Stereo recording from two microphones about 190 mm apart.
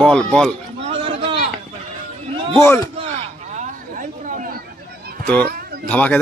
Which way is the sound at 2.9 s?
35° right (ahead or behind).